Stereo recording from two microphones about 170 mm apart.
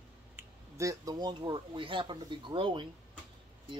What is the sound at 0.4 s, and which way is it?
Speech, 20° right (ahead or behind).